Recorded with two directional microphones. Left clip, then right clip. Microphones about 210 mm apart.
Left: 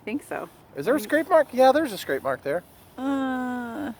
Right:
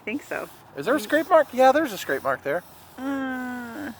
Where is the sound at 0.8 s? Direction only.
20° left (ahead or behind).